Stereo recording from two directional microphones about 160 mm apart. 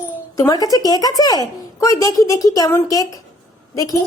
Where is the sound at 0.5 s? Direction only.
25° left (ahead or behind).